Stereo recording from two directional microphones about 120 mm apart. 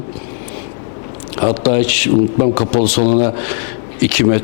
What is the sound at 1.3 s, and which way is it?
Speech, 15° left (ahead or behind).